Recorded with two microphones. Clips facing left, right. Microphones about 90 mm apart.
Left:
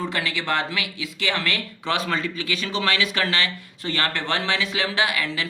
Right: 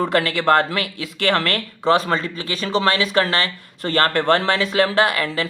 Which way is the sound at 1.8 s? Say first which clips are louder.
Right 8 dB; 35° right (ahead or behind).